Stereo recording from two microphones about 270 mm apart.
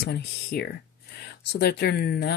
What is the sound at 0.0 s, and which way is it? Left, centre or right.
Speech, left.